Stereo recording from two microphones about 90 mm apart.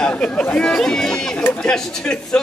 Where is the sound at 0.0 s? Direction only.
10° left (ahead or behind).